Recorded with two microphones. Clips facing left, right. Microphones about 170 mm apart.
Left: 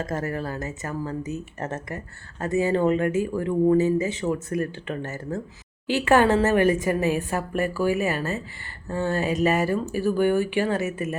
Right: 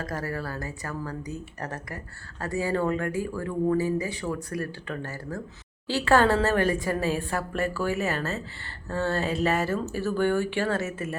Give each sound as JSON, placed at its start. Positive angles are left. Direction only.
{"t": 0.0, "sound": "a woman's voice", "side_deg": 25}